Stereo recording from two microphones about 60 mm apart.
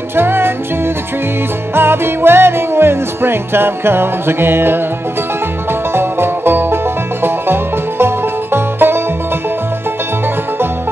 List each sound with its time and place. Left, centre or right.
0.1 s music: right
1.8 s music: right